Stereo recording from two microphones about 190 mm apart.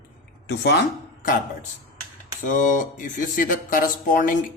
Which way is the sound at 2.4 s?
45° left (ahead or behind).